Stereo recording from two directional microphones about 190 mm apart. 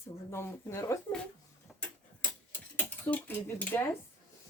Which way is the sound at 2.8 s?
10° left (ahead or behind).